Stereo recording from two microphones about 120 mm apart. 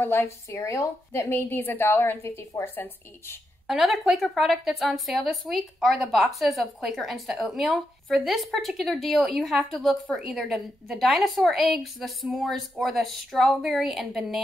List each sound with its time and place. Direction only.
0.0 s a woman's voice: 20° left (ahead or behind)
3.6 s a woman's voice: 5° right (ahead or behind)